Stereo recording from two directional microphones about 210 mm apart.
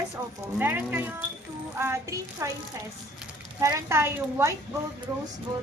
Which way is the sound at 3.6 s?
15° right (ahead or behind).